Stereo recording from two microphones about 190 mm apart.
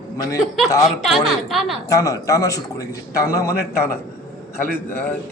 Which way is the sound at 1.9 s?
20° left (ahead or behind).